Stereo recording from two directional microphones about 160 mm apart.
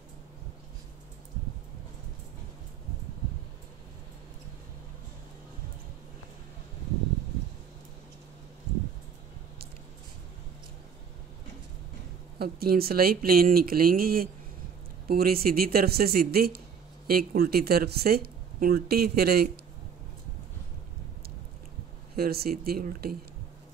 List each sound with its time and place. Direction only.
12.4 s speech: 75° right (ahead or behind)
22.1 s speech: 75° right (ahead or behind)